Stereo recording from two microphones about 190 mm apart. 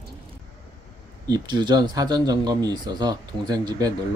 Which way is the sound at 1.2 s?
20° right (ahead or behind).